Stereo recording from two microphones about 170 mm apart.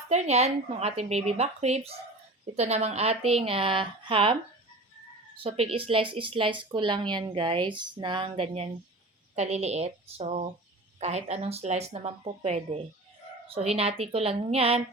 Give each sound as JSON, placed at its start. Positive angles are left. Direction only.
{"t": 0.1, "sound": "a woman's voice", "side_deg": -40}
{"t": 5.4, "sound": "a woman's voice", "side_deg": -35}